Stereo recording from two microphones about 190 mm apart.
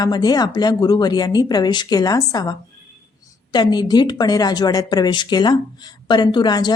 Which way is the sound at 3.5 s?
20° left (ahead or behind).